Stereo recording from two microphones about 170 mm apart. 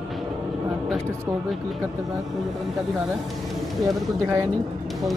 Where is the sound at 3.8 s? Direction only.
15° right (ahead or behind).